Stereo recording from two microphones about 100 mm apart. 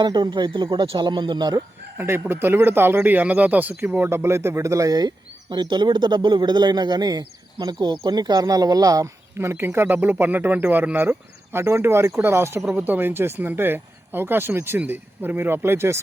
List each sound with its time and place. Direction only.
0.0 s speech: 50° right (ahead or behind)
2.0 s speech: 20° right (ahead or behind)